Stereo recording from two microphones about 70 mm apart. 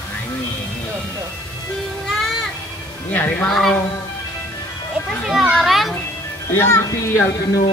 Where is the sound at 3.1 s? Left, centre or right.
Left.